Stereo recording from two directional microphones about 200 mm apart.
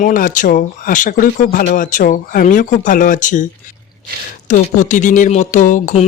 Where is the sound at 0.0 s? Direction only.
40° left (ahead or behind).